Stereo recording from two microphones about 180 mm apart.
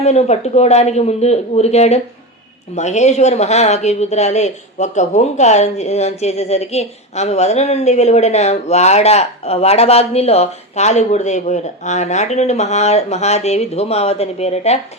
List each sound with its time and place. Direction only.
0.0 s speech: 35° left (ahead or behind)